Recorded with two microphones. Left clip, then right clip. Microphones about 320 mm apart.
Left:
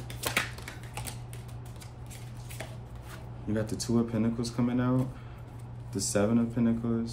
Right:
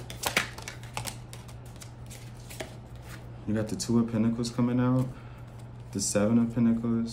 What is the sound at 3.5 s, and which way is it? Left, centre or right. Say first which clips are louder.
Speech: right 1 dB; centre.